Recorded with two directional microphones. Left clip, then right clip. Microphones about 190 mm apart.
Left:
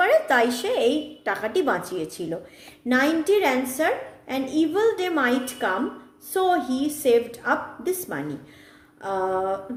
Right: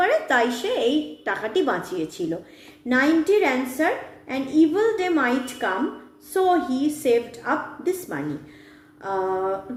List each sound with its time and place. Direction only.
0.0 s a woman's voice: 30° left (ahead or behind)